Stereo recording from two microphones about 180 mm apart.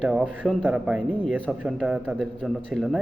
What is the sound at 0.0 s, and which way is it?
A man's voice, centre (ahead or behind).